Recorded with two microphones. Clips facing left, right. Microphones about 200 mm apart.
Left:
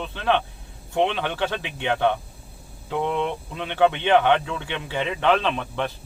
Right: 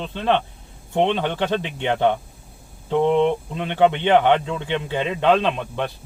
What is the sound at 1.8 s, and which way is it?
Speech, 20° right (ahead or behind).